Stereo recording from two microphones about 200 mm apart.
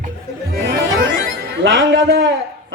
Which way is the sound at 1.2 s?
65° right (ahead or behind).